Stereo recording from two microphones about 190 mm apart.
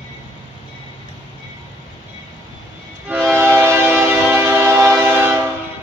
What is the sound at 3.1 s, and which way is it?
Train, 10° right (ahead or behind).